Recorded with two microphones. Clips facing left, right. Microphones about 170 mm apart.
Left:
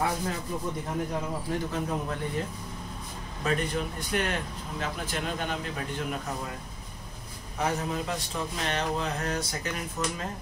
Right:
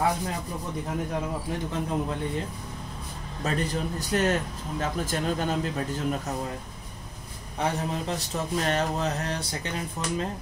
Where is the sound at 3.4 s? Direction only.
35° right (ahead or behind).